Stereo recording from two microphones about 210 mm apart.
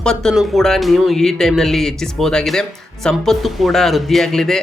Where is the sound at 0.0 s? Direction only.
5° left (ahead or behind).